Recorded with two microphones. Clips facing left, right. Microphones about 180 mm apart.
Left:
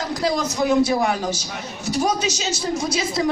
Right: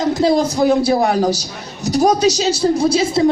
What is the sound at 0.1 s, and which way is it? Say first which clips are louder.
A woman's voice: right 8 dB; 25° right (ahead or behind).